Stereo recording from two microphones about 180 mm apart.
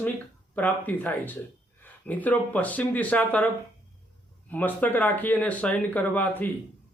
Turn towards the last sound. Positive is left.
turn(degrees=10)  # may be behind; listen again after turning